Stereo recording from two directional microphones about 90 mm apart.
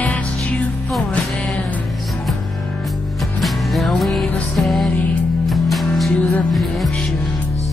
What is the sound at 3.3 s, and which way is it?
Music, centre (ahead or behind).